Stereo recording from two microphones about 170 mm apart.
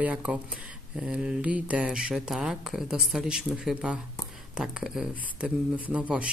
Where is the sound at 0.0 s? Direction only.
5° right (ahead or behind).